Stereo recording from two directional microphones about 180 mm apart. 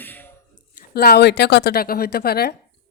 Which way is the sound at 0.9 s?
60° left (ahead or behind).